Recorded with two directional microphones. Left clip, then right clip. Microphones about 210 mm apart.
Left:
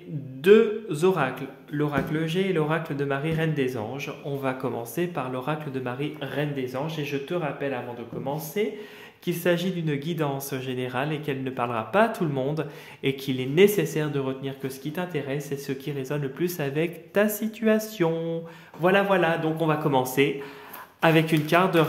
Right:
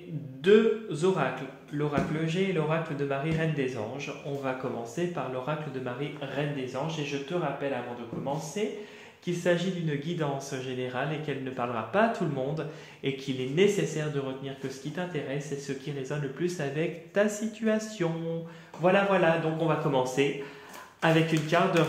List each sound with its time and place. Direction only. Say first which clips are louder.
0.4 s a man's voice: left 4 dB; 50° left (ahead or behind)
8.6 s a man's voice: left 5 dB; 50° left (ahead or behind)